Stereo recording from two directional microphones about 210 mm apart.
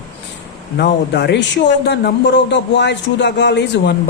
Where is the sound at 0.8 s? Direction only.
50° left (ahead or behind).